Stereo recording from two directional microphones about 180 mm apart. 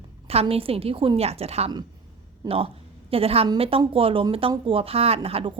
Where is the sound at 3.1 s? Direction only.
35° right (ahead or behind).